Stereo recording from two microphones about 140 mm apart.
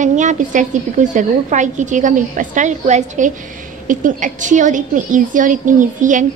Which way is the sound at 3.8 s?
70° right (ahead or behind).